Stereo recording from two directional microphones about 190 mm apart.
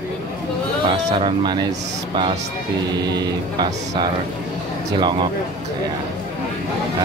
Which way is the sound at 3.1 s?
20° right (ahead or behind).